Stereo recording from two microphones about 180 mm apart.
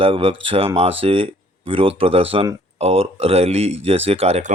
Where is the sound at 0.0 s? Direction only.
30° right (ahead or behind).